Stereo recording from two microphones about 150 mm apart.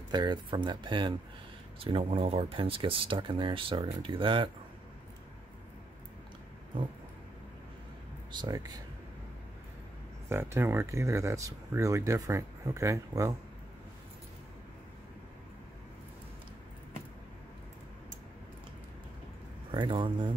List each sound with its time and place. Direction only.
0.1 s speech: 30° right (ahead or behind)
8.3 s speech: 30° right (ahead or behind)
10.3 s speech: 15° right (ahead or behind)
19.7 s speech: 30° right (ahead or behind)